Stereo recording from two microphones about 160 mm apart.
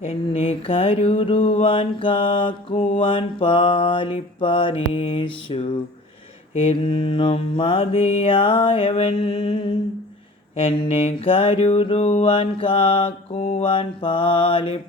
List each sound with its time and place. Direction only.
0.0 s mantra: 35° left (ahead or behind)
10.6 s mantra: 35° left (ahead or behind)